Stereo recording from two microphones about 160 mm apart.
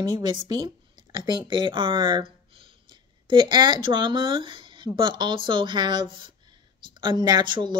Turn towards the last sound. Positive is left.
turn(degrees=-30)  # may be behind; listen again after turning